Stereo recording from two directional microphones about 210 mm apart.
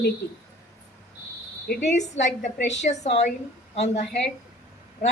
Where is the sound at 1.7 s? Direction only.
35° left (ahead or behind).